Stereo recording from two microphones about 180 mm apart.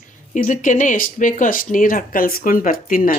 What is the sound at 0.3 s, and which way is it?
Speech, 45° left (ahead or behind).